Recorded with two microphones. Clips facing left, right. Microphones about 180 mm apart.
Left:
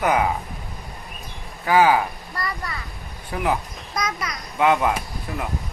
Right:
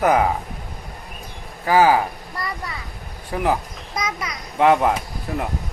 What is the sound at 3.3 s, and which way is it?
Speech, 35° right (ahead or behind).